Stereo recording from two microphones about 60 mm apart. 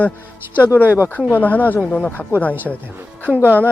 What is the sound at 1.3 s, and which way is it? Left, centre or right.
Speech, left.